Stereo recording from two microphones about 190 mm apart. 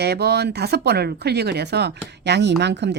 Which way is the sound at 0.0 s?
60° right (ahead or behind).